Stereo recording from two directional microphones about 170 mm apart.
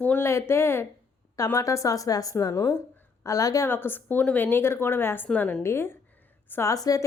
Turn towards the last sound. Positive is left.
turn(degrees=20)  # may be behind; listen again after turning